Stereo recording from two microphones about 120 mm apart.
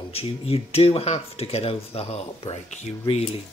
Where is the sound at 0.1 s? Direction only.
55° left (ahead or behind).